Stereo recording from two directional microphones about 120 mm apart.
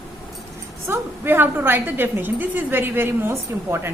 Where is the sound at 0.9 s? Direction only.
15° right (ahead or behind).